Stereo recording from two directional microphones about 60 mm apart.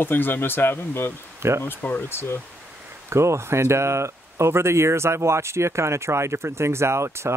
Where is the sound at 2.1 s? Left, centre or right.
Left.